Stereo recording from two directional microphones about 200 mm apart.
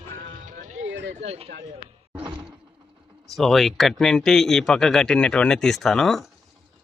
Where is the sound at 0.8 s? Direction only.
65° right (ahead or behind).